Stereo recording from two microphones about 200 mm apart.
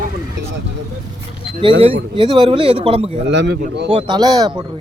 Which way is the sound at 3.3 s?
60° right (ahead or behind).